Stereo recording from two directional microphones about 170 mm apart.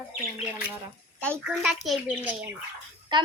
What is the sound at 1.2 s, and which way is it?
Speech, 5° left (ahead or behind).